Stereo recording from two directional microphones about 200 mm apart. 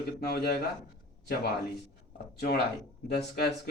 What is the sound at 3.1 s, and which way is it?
Speech, 55° left (ahead or behind).